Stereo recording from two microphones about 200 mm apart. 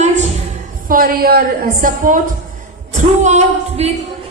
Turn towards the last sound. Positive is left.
turn(degrees=-30)  # may be behind; listen again after turning